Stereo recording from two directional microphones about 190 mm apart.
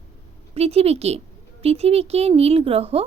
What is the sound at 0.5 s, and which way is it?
A woman's voice, 30° right (ahead or behind).